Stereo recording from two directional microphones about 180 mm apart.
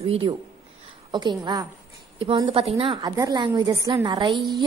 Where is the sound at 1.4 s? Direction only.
20° right (ahead or behind).